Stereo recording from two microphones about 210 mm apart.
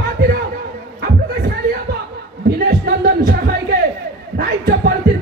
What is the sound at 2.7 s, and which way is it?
Music, 45° right (ahead or behind).